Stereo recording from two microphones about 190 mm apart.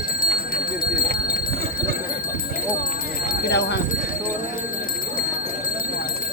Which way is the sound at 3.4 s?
60° left (ahead or behind).